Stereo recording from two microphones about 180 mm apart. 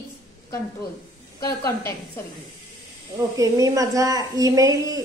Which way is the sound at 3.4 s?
20° right (ahead or behind).